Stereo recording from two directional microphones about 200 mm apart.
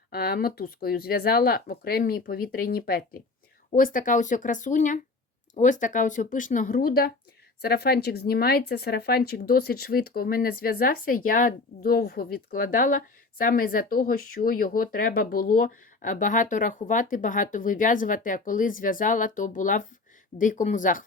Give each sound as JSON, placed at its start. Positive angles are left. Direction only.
{"t": 0.1, "sound": "speech", "side_deg": 50}